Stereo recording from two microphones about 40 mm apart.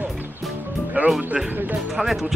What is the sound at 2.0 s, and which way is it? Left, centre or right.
Music, centre.